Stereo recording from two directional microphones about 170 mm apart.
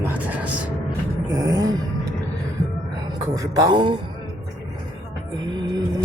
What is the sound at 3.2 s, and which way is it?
Speech, 20° right (ahead or behind).